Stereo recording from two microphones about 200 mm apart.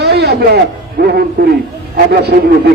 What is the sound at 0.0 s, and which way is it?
A man's voice, 55° right (ahead or behind).